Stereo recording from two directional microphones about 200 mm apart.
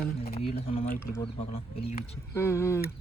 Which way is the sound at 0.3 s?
30° left (ahead or behind).